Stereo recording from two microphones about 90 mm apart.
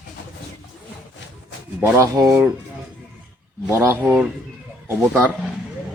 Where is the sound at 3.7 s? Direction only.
25° right (ahead or behind).